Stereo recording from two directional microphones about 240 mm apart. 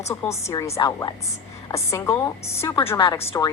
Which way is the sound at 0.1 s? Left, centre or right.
Centre.